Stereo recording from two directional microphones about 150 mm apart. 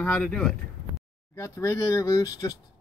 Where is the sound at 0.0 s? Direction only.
5° left (ahead or behind).